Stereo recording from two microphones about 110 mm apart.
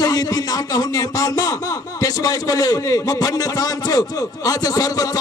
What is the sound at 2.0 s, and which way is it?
A man's voice, 35° left (ahead or behind).